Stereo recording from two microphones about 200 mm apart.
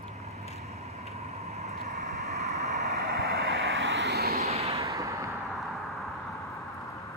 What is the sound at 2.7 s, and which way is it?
Vehicle, 50° right (ahead or behind).